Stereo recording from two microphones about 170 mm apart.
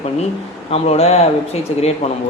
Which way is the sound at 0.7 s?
35° left (ahead or behind).